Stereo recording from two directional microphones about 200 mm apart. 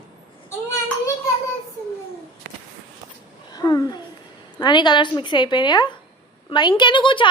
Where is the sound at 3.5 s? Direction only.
20° left (ahead or behind).